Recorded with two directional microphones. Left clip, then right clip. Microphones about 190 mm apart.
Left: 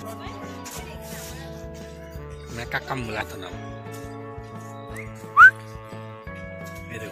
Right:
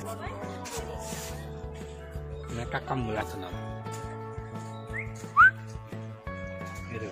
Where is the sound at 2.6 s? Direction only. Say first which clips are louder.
Left 4 dB; centre (ahead or behind).